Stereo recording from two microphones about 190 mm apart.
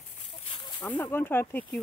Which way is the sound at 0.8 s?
10° left (ahead or behind).